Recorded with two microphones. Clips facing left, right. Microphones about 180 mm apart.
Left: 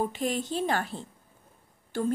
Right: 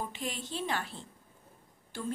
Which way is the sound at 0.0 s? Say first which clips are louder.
Left 9 dB; 45° left (ahead or behind).